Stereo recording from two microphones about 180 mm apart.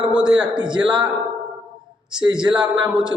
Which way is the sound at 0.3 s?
5° right (ahead or behind).